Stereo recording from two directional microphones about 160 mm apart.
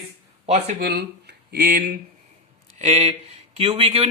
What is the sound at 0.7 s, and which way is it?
Speech, 90° right.